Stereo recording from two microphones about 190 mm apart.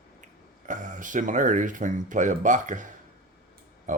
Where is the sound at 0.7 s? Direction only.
40° right (ahead or behind).